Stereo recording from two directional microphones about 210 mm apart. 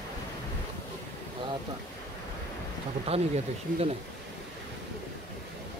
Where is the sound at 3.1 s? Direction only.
30° right (ahead or behind).